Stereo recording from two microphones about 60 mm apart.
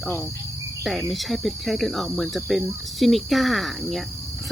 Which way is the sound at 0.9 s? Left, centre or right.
Centre.